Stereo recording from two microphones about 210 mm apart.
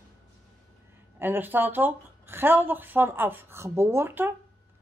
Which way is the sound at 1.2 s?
10° right (ahead or behind).